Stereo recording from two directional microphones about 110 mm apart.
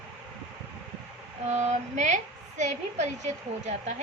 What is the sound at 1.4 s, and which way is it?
A woman's voice, 90° right.